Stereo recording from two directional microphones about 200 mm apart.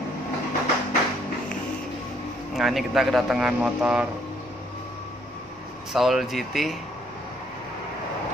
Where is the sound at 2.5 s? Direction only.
Centre (ahead or behind).